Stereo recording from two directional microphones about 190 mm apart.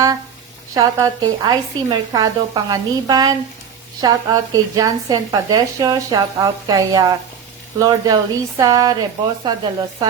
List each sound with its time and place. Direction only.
0.7 s a woman's voice: 15° right (ahead or behind)